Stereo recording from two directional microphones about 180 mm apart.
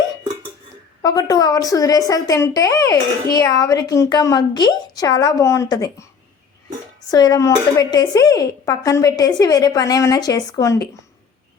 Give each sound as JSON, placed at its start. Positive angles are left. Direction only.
{"t": 1.0, "sound": "speech", "side_deg": 20}
{"t": 7.1, "sound": "speech", "side_deg": 20}